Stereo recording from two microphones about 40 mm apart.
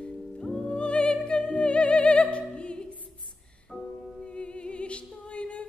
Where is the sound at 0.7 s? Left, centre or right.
Left.